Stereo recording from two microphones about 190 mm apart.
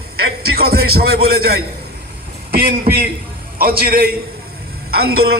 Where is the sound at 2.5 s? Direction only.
55° right (ahead or behind).